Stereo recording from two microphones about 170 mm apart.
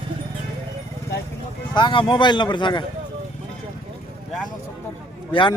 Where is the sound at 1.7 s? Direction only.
25° left (ahead or behind).